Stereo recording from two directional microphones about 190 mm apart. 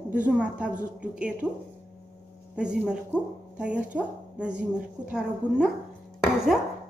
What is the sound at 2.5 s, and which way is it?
Speech, 5° right (ahead or behind).